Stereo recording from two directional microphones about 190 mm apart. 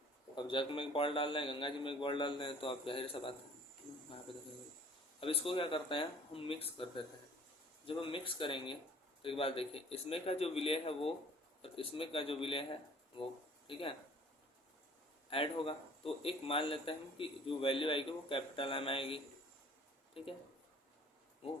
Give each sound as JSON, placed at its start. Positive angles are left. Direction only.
{"t": 0.3, "sound": "speech", "side_deg": 25}
{"t": 5.2, "sound": "a man's voice", "side_deg": 30}
{"t": 15.3, "sound": "speech", "side_deg": 30}